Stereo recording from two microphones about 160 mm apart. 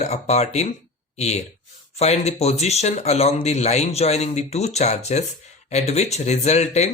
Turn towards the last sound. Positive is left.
turn(degrees=45)  # may be behind; listen again after turning